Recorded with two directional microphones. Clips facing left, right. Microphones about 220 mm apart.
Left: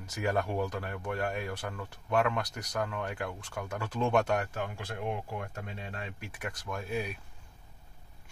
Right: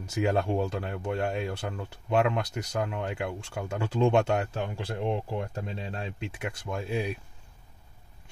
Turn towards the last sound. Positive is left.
turn(degrees=-25)  # may be behind; listen again after turning